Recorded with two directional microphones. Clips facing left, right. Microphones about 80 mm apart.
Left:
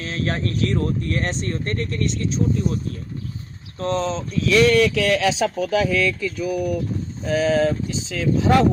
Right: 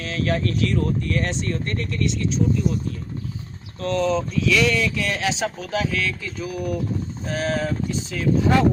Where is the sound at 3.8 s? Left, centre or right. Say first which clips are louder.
Right 1 dB; left.